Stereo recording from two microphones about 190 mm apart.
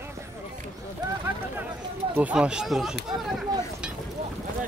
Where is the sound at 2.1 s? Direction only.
5° right (ahead or behind).